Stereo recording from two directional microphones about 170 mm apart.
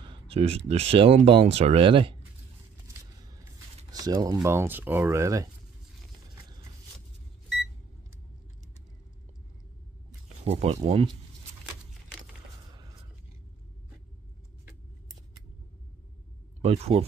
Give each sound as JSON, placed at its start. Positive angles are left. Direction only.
{"t": 0.0, "sound": "speech", "side_deg": -30}
{"t": 3.9, "sound": "speech", "side_deg": -20}
{"t": 10.4, "sound": "speech", "side_deg": -40}
{"t": 12.1, "sound": "a sound", "side_deg": 0}
{"t": 12.6, "sound": "a sound", "side_deg": -25}
{"t": 16.6, "sound": "speech", "side_deg": -35}